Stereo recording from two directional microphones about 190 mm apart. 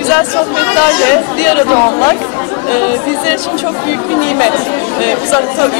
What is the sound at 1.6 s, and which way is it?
Speech, 25° left (ahead or behind).